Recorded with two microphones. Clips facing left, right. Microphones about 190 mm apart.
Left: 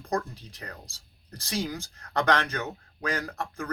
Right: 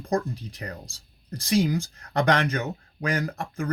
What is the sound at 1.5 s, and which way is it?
Speech, 15° right (ahead or behind).